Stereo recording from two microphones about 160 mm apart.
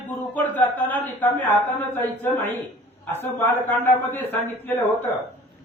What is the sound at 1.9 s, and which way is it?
Speech, 10° left (ahead or behind).